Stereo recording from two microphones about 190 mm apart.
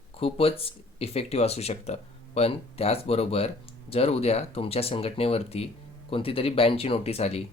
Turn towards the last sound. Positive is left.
turn(degrees=35)  # may be behind; listen again after turning